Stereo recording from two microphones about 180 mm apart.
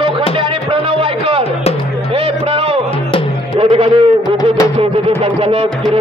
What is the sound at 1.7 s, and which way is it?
Speech, 35° left (ahead or behind).